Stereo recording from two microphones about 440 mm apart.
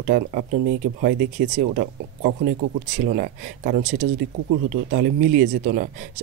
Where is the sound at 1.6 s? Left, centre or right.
Centre.